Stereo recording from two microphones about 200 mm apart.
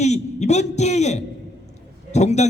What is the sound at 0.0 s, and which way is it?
A man's voice, 35° left (ahead or behind).